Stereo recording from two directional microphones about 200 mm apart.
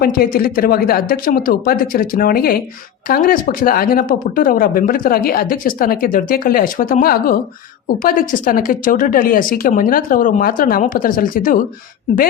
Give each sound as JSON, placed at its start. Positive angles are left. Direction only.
{"t": 0.0, "sound": "speech", "side_deg": 45}